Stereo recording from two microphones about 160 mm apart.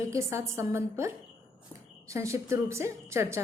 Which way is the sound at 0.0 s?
20° right (ahead or behind).